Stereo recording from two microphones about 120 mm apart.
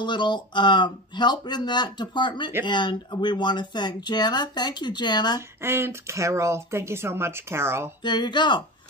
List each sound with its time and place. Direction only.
0.0 s speech: 40° left (ahead or behind)
5.6 s speech: 20° right (ahead or behind)
8.0 s speech: 40° left (ahead or behind)